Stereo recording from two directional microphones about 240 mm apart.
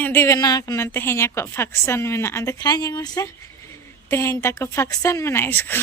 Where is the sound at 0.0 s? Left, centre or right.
Centre.